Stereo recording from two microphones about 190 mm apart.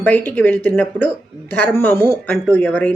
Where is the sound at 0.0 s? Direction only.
10° left (ahead or behind).